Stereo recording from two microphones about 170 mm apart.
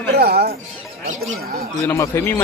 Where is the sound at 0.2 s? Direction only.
70° right (ahead or behind).